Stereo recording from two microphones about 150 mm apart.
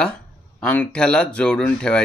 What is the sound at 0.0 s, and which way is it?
Speech, 5° left (ahead or behind).